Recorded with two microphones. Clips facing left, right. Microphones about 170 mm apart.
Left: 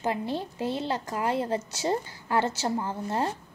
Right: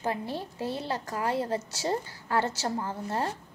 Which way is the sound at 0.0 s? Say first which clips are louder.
Left 3 dB; 20° left (ahead or behind).